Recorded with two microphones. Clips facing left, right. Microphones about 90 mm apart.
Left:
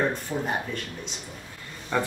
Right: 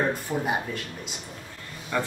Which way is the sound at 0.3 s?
15° right (ahead or behind).